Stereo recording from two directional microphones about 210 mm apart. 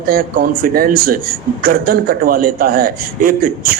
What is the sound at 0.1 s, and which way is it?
A man's voice, 45° right (ahead or behind).